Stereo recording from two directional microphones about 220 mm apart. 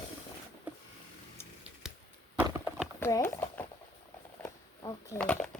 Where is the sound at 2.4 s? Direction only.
10° right (ahead or behind).